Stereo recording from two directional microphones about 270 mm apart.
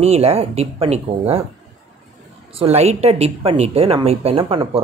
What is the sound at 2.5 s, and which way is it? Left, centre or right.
A woman's voice, right.